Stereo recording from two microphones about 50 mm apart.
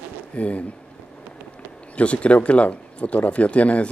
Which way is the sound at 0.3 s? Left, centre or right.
Left.